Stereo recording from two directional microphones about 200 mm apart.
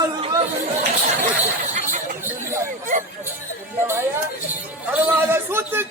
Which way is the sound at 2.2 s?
10° right (ahead or behind).